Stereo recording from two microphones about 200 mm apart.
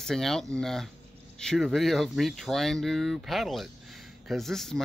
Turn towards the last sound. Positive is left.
turn(degrees=0)  # may be behind; listen again after turning